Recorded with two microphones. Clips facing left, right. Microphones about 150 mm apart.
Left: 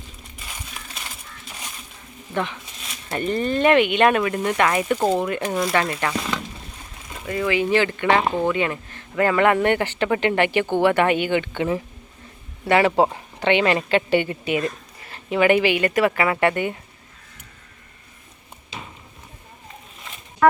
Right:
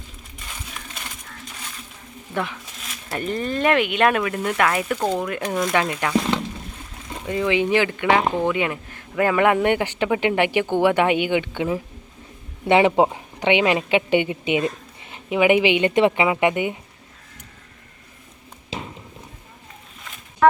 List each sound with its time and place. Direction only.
2.3 s speech: 5° right (ahead or behind)
7.3 s speech: 15° right (ahead or behind)
12.6 s speech: 20° right (ahead or behind)